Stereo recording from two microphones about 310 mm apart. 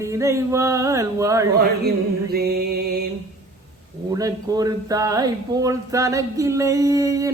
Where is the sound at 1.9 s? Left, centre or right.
Right.